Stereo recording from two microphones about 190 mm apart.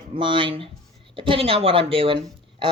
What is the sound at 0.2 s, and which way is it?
Speech, 25° right (ahead or behind).